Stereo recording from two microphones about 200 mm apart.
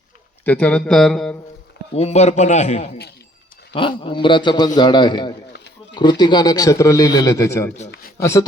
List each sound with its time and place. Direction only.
0.4 s speech: 5° left (ahead or behind)
2.0 s a man's voice: 35° left (ahead or behind); by 8.4 s 15° left (ahead or behind)